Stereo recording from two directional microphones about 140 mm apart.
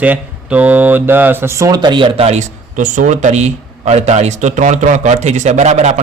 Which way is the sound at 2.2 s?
60° right (ahead or behind).